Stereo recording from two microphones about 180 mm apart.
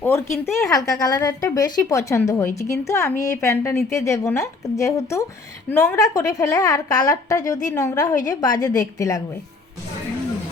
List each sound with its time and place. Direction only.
0.0 s a woman's voice: 15° left (ahead or behind)